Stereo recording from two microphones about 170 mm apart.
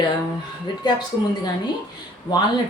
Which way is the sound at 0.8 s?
25° left (ahead or behind).